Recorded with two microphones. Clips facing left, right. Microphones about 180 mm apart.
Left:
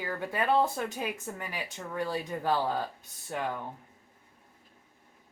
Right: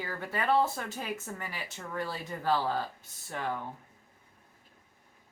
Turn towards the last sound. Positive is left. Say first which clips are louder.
# left 1 dB
turn(degrees=15)  # may be behind; listen again after turning